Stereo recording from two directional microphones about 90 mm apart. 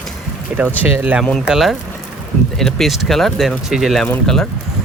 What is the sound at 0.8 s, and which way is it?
Speech, 20° right (ahead or behind).